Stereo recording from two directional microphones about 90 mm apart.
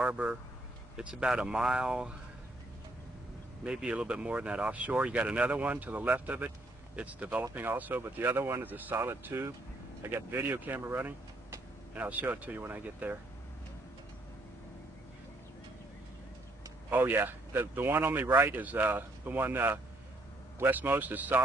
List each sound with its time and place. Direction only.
0.0 s speech: 15° right (ahead or behind)
3.6 s speech: 10° right (ahead or behind)
16.9 s speech: 25° right (ahead or behind)